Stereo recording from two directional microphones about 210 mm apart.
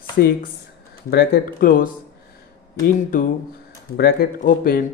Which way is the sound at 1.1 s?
45° left (ahead or behind).